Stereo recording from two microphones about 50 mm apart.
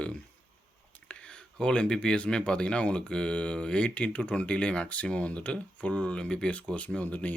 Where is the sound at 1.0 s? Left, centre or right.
Left.